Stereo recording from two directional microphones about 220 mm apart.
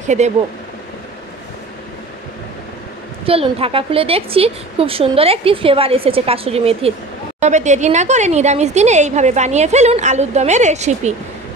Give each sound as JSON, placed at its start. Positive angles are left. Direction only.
{"t": 0.0, "sound": "speech", "side_deg": -35}
{"t": 3.3, "sound": "a woman's voice", "side_deg": -25}